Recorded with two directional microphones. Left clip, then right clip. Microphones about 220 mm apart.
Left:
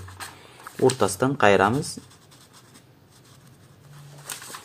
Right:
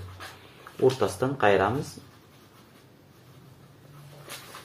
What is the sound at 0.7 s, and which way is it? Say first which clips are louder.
Speech: left 3 dB; 30° left (ahead or behind).